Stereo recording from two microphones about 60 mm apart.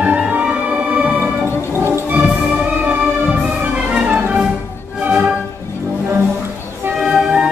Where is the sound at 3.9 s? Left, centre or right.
Right.